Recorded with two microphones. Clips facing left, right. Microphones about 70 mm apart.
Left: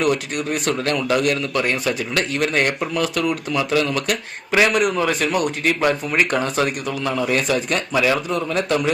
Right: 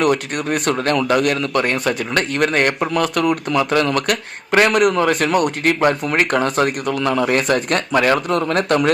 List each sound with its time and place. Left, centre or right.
0.0 s speech: right